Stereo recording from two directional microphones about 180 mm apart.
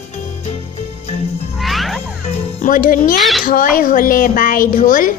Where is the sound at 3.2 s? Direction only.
Centre (ahead or behind).